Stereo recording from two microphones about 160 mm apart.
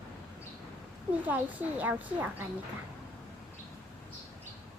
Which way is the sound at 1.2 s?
10° right (ahead or behind).